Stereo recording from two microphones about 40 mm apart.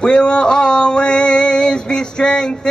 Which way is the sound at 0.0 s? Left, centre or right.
Left.